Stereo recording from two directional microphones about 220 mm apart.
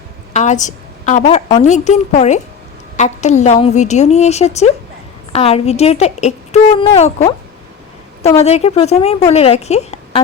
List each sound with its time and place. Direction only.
0.3 s a woman's voice: 35° left (ahead or behind)
8.4 s a woman's voice: 30° left (ahead or behind)